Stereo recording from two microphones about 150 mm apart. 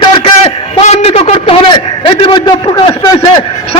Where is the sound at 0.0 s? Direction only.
35° left (ahead or behind).